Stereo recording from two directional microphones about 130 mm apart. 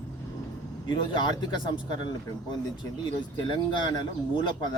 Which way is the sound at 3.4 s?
35° left (ahead or behind).